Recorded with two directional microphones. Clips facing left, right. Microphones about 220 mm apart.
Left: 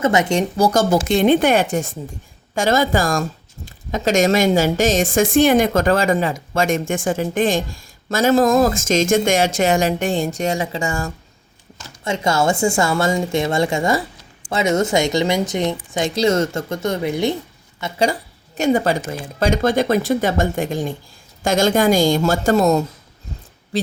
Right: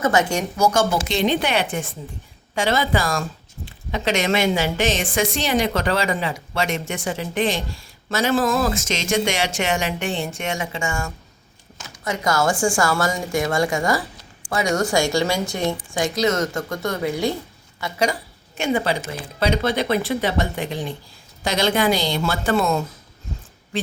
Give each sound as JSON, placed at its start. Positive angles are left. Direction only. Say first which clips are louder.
{"t": 0.0, "sound": "a woman's voice", "louder": "left 3 dB", "side_deg": 25}
{"t": 18.1, "sound": "a woman's voice", "louder": "left 3 dB", "side_deg": 40}
{"t": 23.7, "sound": "a sound", "louder": "left 4 dB", "side_deg": 35}